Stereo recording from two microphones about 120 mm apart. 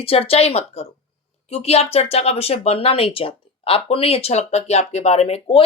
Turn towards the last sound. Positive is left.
turn(degrees=55)  # may be behind; listen again after turning